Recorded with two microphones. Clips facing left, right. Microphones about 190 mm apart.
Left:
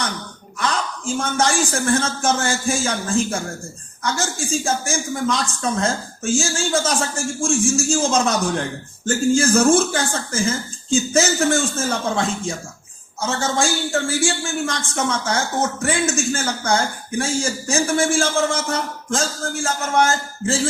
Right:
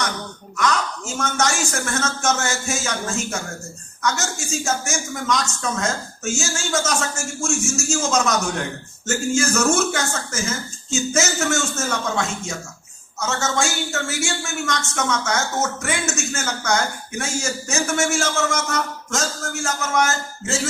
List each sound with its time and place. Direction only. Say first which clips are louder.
0.5 s a woman's voice: right 2 dB; 30° left (ahead or behind)